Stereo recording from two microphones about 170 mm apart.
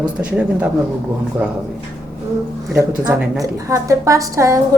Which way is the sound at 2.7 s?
15° right (ahead or behind).